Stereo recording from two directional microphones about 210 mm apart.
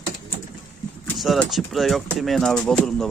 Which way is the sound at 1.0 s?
Centre (ahead or behind).